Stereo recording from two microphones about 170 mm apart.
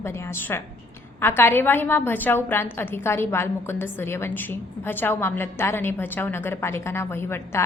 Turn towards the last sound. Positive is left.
turn(degrees=15)  # may be behind; listen again after turning